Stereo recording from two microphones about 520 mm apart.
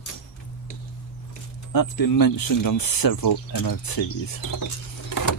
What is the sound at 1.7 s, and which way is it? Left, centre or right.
Speech, left.